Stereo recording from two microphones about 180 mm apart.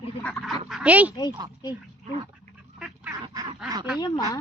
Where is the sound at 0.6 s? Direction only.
5° right (ahead or behind).